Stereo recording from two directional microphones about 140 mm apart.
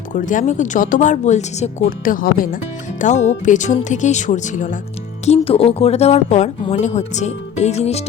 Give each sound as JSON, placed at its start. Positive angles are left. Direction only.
{"t": 0.1, "sound": "speech", "side_deg": 70}
{"t": 2.0, "sound": "speech", "side_deg": 85}
{"t": 3.0, "sound": "speech", "side_deg": 60}
{"t": 5.2, "sound": "speech", "side_deg": 45}